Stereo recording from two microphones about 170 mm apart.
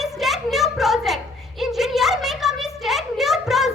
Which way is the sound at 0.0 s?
Centre (ahead or behind).